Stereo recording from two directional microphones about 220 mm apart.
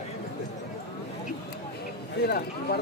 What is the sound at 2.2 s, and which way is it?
Speech, 45° left (ahead or behind).